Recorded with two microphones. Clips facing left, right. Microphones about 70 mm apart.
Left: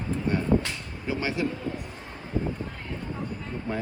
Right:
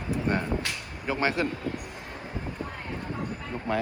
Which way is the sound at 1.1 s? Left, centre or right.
Right.